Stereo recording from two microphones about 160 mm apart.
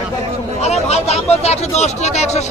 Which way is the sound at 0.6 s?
40° left (ahead or behind).